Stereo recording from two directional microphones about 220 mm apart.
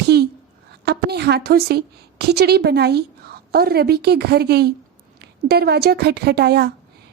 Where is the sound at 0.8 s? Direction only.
50° right (ahead or behind).